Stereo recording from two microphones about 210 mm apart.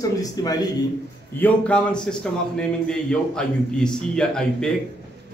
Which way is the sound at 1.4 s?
5° left (ahead or behind).